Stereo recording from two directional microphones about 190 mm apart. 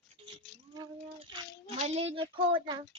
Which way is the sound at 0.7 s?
25° right (ahead or behind).